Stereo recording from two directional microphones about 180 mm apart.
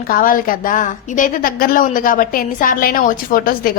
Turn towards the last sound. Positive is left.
turn(degrees=55)  # may be behind; listen again after turning